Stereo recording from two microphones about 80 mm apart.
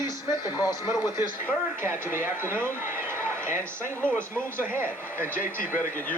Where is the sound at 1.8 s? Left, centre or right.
Right.